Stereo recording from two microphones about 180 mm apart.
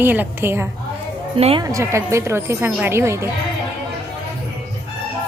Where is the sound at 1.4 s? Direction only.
30° right (ahead or behind).